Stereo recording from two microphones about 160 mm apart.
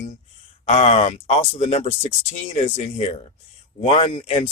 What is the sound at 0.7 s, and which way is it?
Speech, 45° left (ahead or behind).